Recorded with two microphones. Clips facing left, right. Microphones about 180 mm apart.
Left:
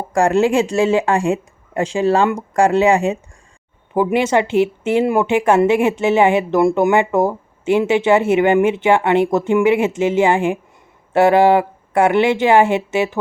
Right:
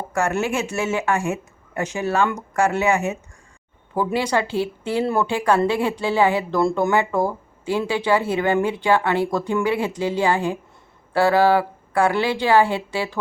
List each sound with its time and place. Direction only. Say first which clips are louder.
0.1 s speech: left 8 dB; 30° left (ahead or behind)
3.9 s a woman's voice: left 6 dB; 20° left (ahead or behind)